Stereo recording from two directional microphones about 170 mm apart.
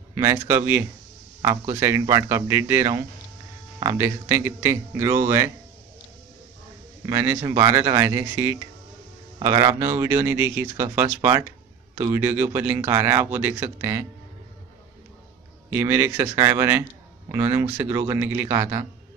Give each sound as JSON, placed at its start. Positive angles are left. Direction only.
{"t": 0.1, "sound": "speech", "side_deg": -20}
{"t": 7.1, "sound": "speech", "side_deg": -15}
{"t": 15.7, "sound": "speech", "side_deg": -15}